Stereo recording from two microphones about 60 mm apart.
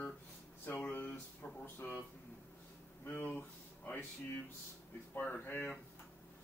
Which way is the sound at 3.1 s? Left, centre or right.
Left.